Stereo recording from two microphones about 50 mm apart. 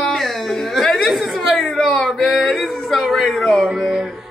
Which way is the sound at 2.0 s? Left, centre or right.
Centre.